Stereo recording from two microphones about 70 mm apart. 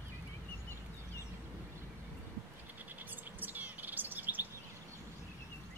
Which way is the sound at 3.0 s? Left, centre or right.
Right.